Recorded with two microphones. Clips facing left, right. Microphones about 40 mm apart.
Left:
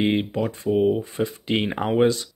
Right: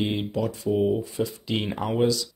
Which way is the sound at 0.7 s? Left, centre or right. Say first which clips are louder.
Left 3 dB; centre.